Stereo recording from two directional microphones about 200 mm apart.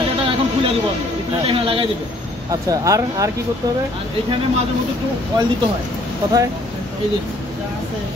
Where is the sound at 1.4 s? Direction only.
25° right (ahead or behind).